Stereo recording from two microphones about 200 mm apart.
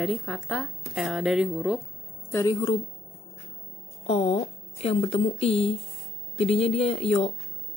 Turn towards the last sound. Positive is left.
turn(degrees=30)  # may be behind; listen again after turning